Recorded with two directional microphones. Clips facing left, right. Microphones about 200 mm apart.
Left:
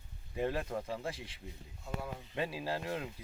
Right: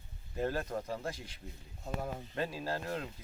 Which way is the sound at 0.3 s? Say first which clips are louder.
Even; centre (ahead or behind).